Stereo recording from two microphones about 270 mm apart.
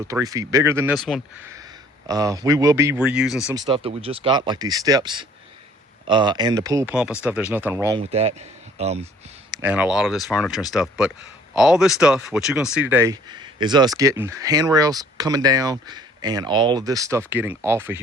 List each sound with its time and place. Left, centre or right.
0.0 s speech: centre
1.5 s speech: centre
3.5 s speech: centre
8.1 s speech: right
9.5 s speech: centre